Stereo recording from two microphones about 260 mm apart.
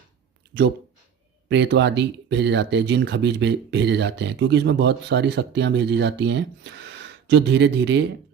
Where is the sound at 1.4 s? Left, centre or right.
Right.